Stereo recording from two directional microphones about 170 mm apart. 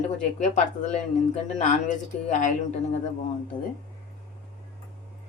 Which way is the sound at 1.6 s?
45° left (ahead or behind).